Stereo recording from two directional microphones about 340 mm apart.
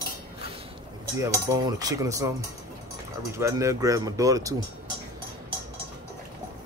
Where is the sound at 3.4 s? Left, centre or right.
Centre.